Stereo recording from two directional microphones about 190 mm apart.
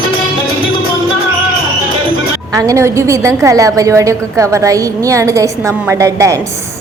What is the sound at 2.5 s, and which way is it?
A woman's voice, 15° right (ahead or behind).